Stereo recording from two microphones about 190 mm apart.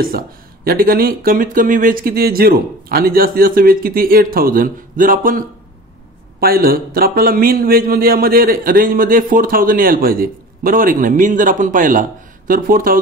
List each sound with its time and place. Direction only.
0.7 s a man's voice: 50° right (ahead or behind)
6.4 s a man's voice: 50° right (ahead or behind)